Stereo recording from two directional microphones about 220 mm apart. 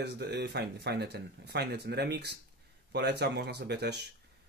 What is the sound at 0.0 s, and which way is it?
Speech, 50° right (ahead or behind).